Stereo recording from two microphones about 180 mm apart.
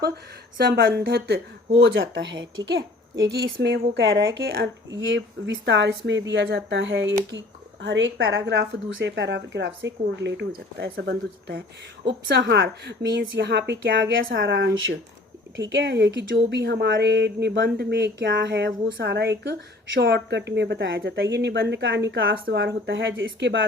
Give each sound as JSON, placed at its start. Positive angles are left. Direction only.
{"t": 0.5, "sound": "speech", "side_deg": -60}
{"t": 3.3, "sound": "speech", "side_deg": -70}
{"t": 5.0, "sound": "speech", "side_deg": -90}
{"t": 15.7, "sound": "speech", "side_deg": -85}